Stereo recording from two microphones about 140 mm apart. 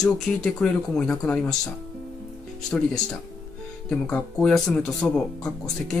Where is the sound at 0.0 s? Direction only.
5° left (ahead or behind).